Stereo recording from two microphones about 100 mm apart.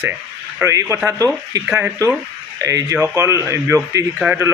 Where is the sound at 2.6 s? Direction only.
35° right (ahead or behind).